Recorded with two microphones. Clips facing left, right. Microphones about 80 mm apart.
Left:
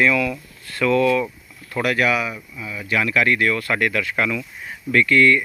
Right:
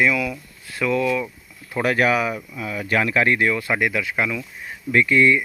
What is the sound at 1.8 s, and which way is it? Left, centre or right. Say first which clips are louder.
Speech: right 1 dB; right.